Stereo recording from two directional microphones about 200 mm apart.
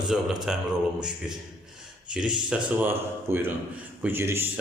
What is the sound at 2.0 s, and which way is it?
Speech, 5° right (ahead or behind).